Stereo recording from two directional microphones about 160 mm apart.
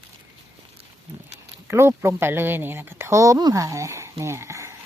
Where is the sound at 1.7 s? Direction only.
15° right (ahead or behind).